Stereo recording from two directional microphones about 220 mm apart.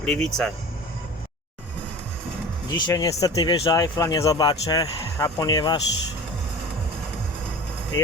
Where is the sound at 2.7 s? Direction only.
15° left (ahead or behind).